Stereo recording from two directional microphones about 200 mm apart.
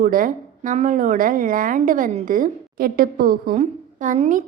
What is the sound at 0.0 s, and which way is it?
Speech, 45° right (ahead or behind).